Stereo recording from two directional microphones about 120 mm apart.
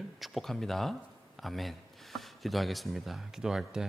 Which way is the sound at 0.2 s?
Centre (ahead or behind).